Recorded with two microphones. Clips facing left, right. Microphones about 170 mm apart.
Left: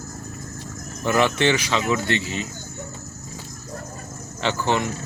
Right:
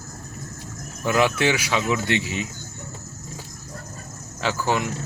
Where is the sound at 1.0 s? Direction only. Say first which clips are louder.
Left 1 dB; 10° right (ahead or behind).